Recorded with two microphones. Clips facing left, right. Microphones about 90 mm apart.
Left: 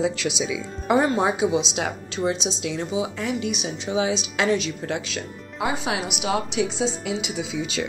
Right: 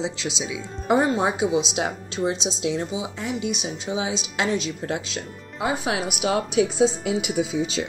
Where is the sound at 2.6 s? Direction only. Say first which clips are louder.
Even; 35° right (ahead or behind).